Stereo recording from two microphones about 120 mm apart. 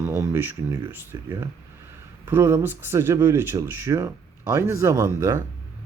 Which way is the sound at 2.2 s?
20° right (ahead or behind).